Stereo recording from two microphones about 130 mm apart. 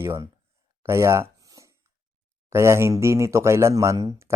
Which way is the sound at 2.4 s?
20° right (ahead or behind).